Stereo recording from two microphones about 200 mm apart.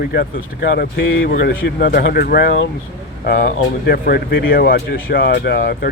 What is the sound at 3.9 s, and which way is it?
Speech, 50° left (ahead or behind).